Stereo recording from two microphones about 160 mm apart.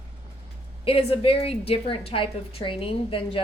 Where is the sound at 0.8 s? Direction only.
35° left (ahead or behind).